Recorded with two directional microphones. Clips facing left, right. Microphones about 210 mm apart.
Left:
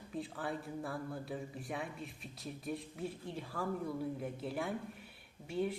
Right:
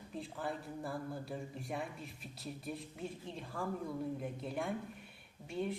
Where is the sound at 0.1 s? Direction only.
Centre (ahead or behind).